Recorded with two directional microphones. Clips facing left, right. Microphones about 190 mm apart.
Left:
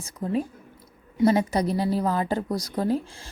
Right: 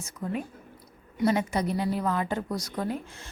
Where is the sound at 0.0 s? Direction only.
30° left (ahead or behind).